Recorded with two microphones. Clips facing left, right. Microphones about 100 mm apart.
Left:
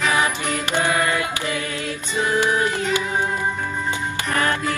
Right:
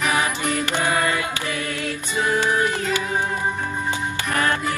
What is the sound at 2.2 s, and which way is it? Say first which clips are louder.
Music: left 1 dB; 20° left (ahead or behind).